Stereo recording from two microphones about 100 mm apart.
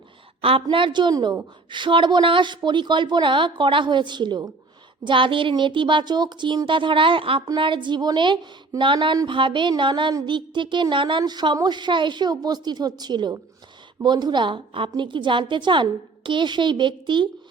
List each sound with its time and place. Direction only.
0.4 s a woman's voice: 65° right (ahead or behind)